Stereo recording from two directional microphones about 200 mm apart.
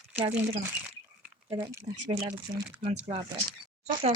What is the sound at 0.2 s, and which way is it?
Speech, 35° right (ahead or behind).